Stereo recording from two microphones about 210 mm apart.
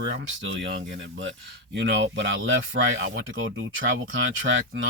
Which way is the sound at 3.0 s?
70° right (ahead or behind).